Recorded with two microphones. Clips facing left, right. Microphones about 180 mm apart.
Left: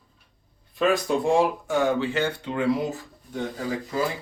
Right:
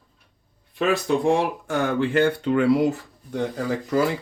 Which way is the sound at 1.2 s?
65° right (ahead or behind).